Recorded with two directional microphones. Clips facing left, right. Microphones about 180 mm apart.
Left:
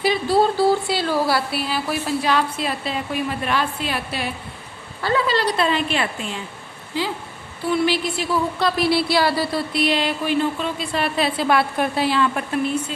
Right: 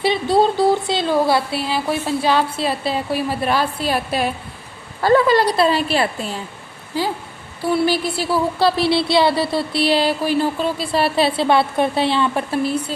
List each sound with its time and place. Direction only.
0.0 s speech: 25° right (ahead or behind)
7.7 s speech: 35° right (ahead or behind)